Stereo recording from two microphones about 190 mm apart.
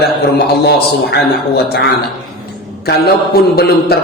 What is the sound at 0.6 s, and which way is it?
Speech, 60° left (ahead or behind).